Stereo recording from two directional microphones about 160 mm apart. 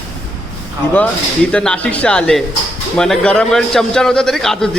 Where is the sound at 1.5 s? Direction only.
5° left (ahead or behind).